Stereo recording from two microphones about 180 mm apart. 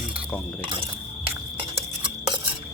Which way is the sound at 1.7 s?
30° right (ahead or behind).